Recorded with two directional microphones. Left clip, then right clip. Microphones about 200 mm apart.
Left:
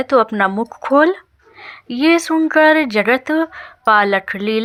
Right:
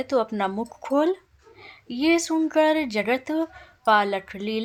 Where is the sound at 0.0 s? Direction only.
10° left (ahead or behind).